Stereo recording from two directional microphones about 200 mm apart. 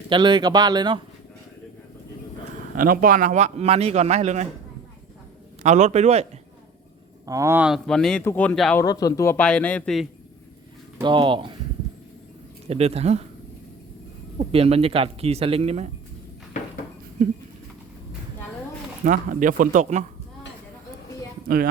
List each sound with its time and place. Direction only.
0.1 s speech: 20° right (ahead or behind)
2.7 s a man's voice: 45° right (ahead or behind)
5.6 s a man's voice: 35° right (ahead or behind)
7.3 s speech: 15° right (ahead or behind); by 8.8 s 5° left (ahead or behind)
8.8 s speech: 20° left (ahead or behind); by 10.1 s 5° left (ahead or behind)
11.0 s speech: 25° right (ahead or behind)
12.6 s a man's voice: 30° right (ahead or behind)
14.3 s speech: 30° right (ahead or behind)
19.0 s a man's voice: 40° right (ahead or behind)
21.4 s speech: 45° right (ahead or behind)